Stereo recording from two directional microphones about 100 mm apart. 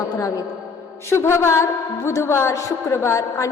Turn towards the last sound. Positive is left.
turn(degrees=30)  # may be behind; listen again after turning